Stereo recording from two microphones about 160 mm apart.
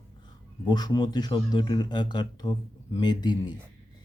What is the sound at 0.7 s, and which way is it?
A man's voice, 25° left (ahead or behind).